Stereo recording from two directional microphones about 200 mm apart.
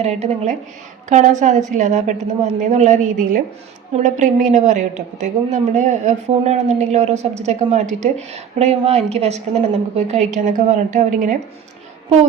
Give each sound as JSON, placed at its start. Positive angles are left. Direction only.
{"t": 0.0, "sound": "a woman's voice", "side_deg": -35}